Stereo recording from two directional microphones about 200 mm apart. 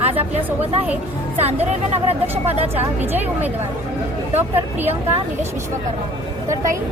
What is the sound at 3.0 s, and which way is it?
Speech, 10° right (ahead or behind).